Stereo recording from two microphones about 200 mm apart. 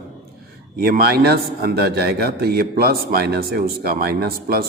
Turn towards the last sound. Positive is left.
turn(degrees=-50)  # may be behind; listen again after turning